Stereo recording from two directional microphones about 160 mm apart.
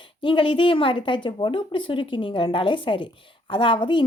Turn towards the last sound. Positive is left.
turn(degrees=30)  # may be behind; listen again after turning